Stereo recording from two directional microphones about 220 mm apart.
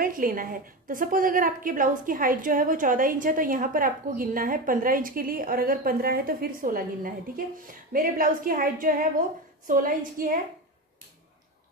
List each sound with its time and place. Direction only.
0.0 s a woman's voice: 40° right (ahead or behind)